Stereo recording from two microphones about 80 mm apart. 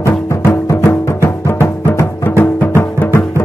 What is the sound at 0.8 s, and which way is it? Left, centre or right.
Music, left.